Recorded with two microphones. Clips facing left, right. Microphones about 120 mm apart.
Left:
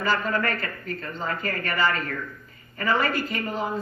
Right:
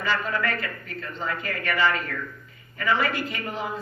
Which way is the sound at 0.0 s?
40° left (ahead or behind).